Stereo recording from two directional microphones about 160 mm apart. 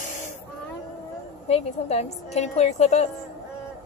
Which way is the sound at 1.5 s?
40° left (ahead or behind).